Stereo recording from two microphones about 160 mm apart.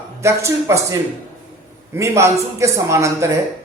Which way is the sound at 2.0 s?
15° right (ahead or behind).